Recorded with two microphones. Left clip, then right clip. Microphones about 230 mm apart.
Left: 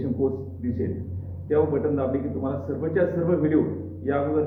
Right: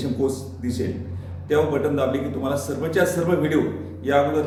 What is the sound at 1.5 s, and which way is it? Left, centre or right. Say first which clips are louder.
A man's voice: right 2 dB; centre.